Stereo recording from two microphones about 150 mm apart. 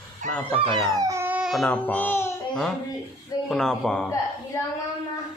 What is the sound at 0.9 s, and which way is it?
Speech, 20° right (ahead or behind).